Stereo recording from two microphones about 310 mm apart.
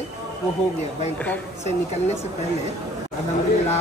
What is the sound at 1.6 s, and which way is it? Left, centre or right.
Speech, left.